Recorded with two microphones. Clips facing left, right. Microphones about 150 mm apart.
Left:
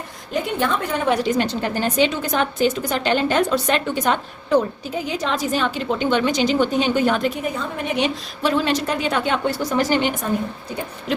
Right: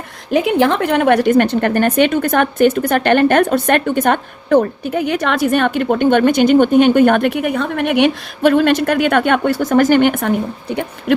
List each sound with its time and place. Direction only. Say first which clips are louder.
0.3 s a woman's voice: right 9 dB; 90° right; by 10.3 s 60° right (ahead or behind)